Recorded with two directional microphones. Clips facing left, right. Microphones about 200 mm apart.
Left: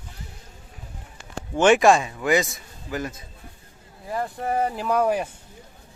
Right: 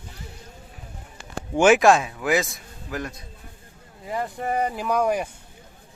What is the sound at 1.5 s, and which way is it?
A man's voice, 5° right (ahead or behind).